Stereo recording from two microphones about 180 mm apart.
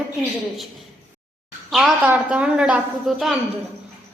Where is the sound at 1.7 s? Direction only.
Centre (ahead or behind).